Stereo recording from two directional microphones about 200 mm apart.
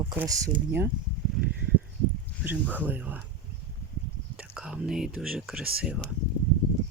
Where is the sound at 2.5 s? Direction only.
10° right (ahead or behind).